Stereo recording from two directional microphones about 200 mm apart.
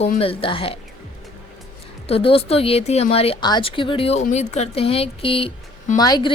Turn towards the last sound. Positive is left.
turn(degrees=20)  # may be behind; listen again after turning